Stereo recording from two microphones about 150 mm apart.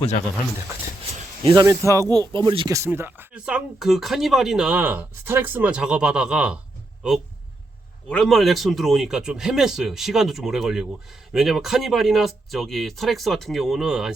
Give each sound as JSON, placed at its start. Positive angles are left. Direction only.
{"t": 1.5, "sound": "speech", "side_deg": -20}
{"t": 2.7, "sound": "speech", "side_deg": -15}
{"t": 8.1, "sound": "speech", "side_deg": 0}